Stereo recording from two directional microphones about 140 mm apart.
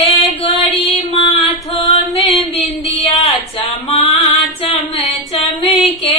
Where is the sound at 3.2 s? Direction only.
45° left (ahead or behind).